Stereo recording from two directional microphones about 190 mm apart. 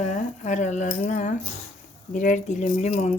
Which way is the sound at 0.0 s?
40° left (ahead or behind).